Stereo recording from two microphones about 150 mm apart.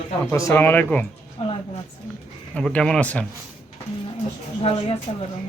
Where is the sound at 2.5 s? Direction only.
5° left (ahead or behind).